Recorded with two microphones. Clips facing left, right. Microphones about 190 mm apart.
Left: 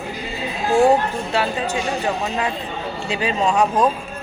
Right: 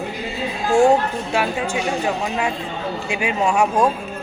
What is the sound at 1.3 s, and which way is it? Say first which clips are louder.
A man's voice: even; 10° right (ahead or behind).